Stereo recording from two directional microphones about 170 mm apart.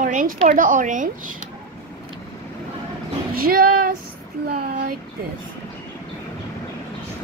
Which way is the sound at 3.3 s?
60° right (ahead or behind).